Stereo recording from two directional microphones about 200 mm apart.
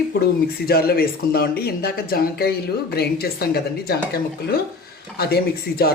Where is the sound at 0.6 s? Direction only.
50° left (ahead or behind).